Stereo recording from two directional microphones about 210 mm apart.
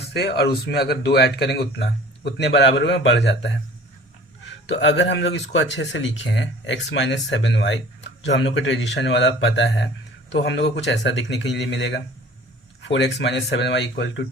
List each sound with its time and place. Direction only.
0.1 s speech: 50° left (ahead or behind)
4.6 s speech: 60° left (ahead or behind)